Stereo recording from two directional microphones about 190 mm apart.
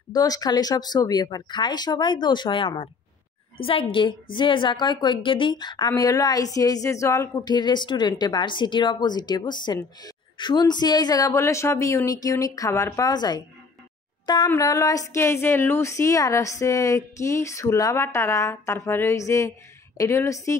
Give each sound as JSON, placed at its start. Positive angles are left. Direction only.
{"t": 0.1, "sound": "a woman's voice", "side_deg": 20}